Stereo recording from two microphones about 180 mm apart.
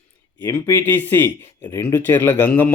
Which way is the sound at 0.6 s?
10° left (ahead or behind).